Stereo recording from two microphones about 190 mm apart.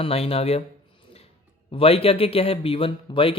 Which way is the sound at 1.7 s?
30° left (ahead or behind).